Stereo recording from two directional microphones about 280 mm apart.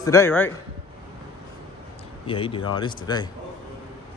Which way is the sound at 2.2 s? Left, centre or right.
Centre.